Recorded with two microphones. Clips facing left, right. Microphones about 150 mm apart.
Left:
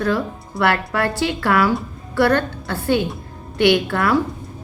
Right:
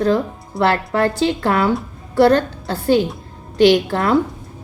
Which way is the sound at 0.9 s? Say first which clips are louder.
Right 4 dB; 25° right (ahead or behind).